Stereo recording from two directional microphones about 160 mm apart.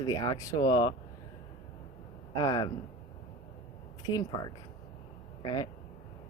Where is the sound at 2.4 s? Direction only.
25° left (ahead or behind).